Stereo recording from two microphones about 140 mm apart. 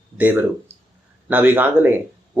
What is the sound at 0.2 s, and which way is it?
Speech, 10° right (ahead or behind).